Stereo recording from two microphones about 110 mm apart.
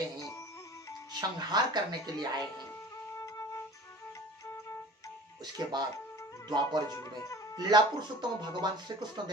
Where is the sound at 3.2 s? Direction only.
30° left (ahead or behind).